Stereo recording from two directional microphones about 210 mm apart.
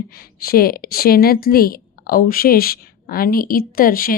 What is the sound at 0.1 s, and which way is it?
A woman's voice, 45° left (ahead or behind).